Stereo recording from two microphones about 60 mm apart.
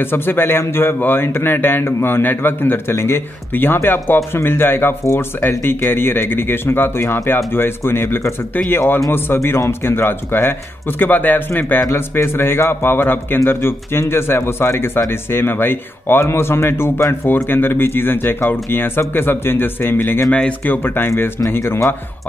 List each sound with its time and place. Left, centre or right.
0.0 s speech: left
7.0 s speech: left
7.5 s speech: left
20.2 s speech: centre
20.6 s speech: left